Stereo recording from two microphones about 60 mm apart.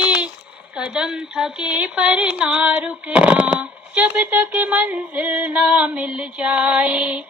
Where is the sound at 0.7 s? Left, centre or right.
Centre.